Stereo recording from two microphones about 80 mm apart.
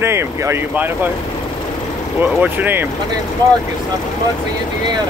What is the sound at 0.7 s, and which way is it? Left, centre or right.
Speech, right.